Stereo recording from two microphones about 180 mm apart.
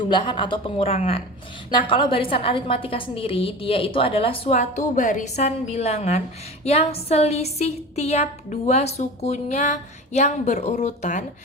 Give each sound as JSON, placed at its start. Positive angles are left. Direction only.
{"t": 0.0, "sound": "a woman's voice", "side_deg": 25}